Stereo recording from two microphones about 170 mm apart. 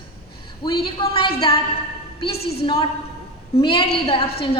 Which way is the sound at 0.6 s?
25° left (ahead or behind).